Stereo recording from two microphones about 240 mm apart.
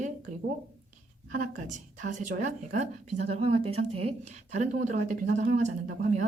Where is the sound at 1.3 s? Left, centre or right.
Right.